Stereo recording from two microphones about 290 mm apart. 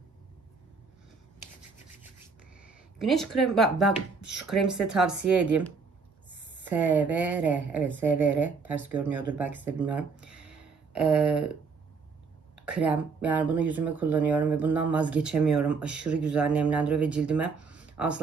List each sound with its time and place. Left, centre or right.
3.1 s speech: centre
5.1 s speech: right
6.7 s speech: centre
10.4 s a sound: right
10.9 s speech: centre
12.6 s speech: centre